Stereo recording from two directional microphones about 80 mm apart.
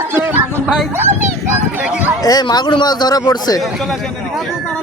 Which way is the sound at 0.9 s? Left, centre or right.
Right.